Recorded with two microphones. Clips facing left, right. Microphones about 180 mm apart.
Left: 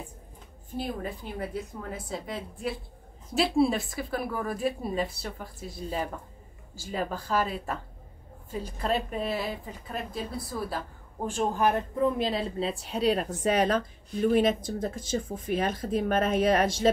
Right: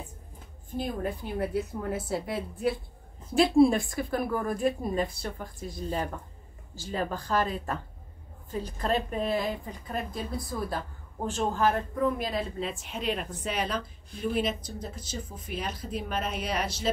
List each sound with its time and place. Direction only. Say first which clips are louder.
0.7 s a woman's voice: right 2 dB; centre (ahead or behind); by 16.9 s 50° left (ahead or behind)